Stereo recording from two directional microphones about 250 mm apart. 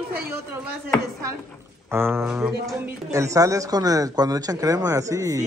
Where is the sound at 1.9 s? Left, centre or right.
Centre.